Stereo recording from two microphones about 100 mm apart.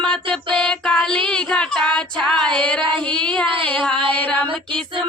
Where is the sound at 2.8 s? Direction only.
55° right (ahead or behind).